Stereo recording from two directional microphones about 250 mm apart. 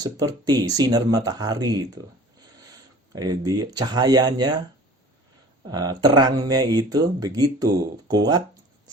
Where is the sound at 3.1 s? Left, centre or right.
Centre.